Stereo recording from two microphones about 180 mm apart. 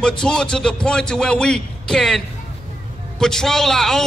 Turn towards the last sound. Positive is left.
turn(degrees=0)  # may be behind; listen again after turning